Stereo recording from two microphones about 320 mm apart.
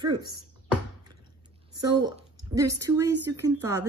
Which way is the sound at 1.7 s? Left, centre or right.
Centre.